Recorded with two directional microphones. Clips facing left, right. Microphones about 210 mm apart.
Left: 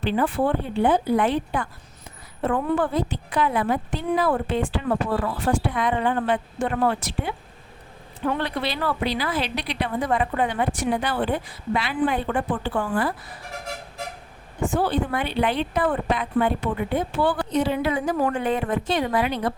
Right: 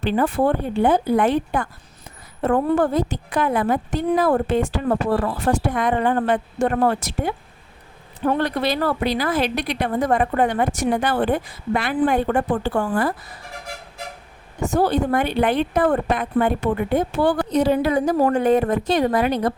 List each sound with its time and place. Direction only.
0.0 s speech: 45° right (ahead or behind)
14.6 s speech: 40° right (ahead or behind)